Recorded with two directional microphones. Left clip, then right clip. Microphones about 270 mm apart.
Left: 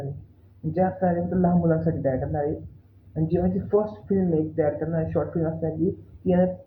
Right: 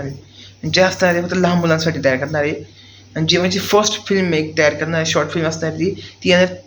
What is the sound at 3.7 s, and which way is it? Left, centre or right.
A man's voice, right.